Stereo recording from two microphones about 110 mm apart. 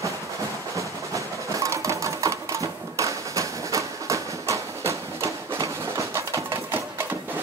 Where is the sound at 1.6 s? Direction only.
30° right (ahead or behind).